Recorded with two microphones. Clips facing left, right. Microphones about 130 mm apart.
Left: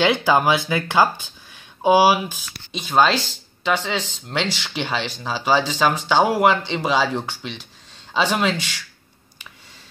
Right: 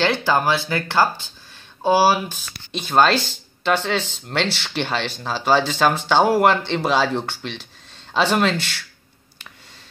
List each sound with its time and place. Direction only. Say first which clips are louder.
0.0 s speech: left 2 dB; 15° left (ahead or behind)